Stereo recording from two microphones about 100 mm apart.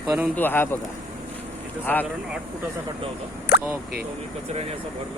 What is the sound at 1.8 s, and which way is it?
Speech, 20° left (ahead or behind).